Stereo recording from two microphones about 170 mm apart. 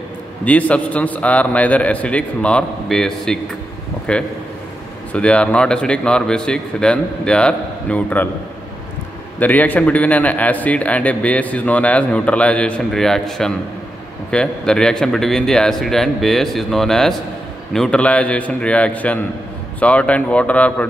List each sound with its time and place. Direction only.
0.5 s a man's voice: 10° left (ahead or behind)
9.4 s a man's voice: 10° left (ahead or behind)